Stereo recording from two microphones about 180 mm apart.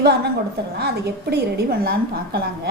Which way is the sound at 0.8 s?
65° right (ahead or behind).